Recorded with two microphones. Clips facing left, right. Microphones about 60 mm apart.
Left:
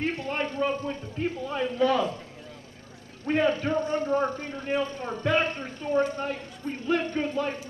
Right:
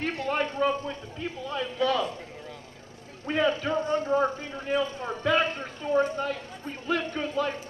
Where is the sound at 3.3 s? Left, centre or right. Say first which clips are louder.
Left 1 dB; left.